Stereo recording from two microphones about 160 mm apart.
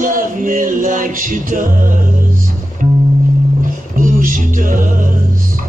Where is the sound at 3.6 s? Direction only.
60° right (ahead or behind).